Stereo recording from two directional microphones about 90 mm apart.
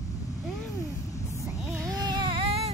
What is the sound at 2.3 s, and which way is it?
Music, 90° right.